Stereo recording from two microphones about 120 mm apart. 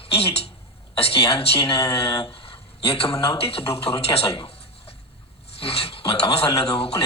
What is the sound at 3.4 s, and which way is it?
A woman's voice, 50° left (ahead or behind).